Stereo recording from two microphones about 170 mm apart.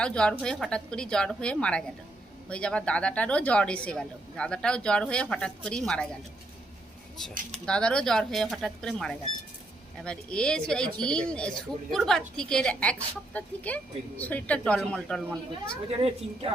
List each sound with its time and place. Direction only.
0.0 s speech: 5° left (ahead or behind)
7.5 s speech: 5° left (ahead or behind)
15.9 s a woman's voice: 35° right (ahead or behind)